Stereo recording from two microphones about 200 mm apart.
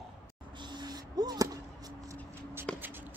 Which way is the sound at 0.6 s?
20° right (ahead or behind).